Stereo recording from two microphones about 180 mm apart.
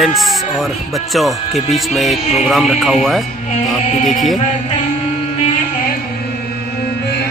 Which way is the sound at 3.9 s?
40° left (ahead or behind).